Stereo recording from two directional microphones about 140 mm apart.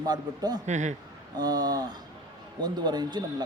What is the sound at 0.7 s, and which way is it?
Speech, 60° right (ahead or behind).